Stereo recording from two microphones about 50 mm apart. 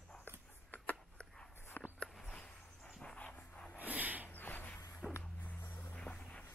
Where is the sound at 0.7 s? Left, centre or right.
Left.